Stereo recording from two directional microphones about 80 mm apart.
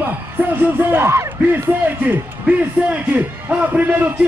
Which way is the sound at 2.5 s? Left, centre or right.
Right.